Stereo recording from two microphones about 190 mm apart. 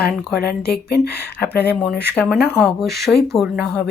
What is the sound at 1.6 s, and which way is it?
Speech, 5° left (ahead or behind).